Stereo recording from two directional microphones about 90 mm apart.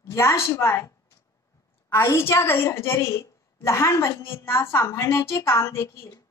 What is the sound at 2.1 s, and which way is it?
A woman's voice, 30° left (ahead or behind).